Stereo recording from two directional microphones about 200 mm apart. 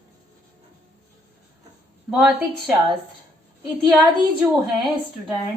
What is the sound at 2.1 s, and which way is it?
Speech, 5° right (ahead or behind).